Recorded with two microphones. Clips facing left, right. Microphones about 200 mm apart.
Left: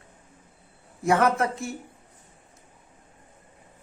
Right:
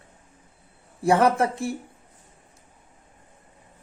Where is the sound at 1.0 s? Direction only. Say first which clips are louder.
Right 2 dB; 30° right (ahead or behind).